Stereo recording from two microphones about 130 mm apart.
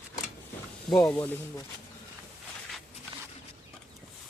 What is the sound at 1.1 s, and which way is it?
Speech, 15° left (ahead or behind).